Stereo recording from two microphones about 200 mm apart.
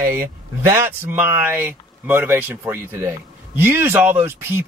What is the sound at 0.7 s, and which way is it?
Speech, 10° right (ahead or behind).